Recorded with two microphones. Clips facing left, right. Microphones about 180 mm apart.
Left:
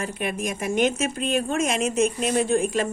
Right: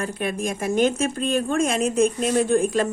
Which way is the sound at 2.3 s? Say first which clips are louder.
Right 2 dB; 50° right (ahead or behind).